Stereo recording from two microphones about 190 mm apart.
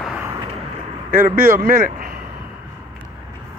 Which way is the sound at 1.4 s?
50° right (ahead or behind).